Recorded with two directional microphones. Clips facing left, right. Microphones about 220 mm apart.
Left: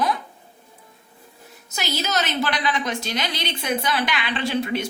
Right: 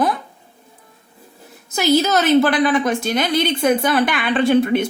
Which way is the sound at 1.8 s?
50° right (ahead or behind).